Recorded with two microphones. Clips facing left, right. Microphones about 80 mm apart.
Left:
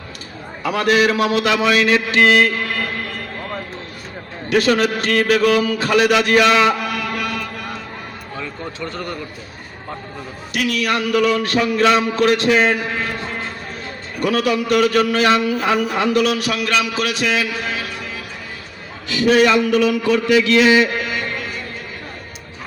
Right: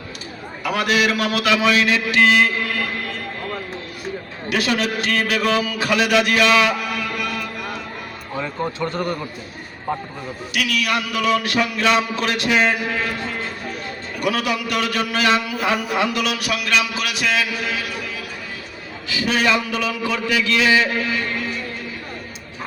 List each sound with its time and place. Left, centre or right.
0.8 s speech: left
4.4 s speech: left
8.4 s a man's voice: right
10.5 s speech: left
14.2 s speech: left
19.2 s mantra: left